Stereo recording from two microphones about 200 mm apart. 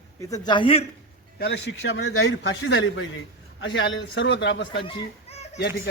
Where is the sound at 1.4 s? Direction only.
55° left (ahead or behind); by 2.5 s 90° left.